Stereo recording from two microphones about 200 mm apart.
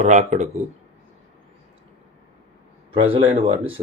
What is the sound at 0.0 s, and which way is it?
Speech, 35° right (ahead or behind).